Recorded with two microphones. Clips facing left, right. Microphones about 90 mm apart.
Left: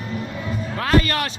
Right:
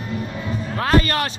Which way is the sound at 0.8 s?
35° right (ahead or behind).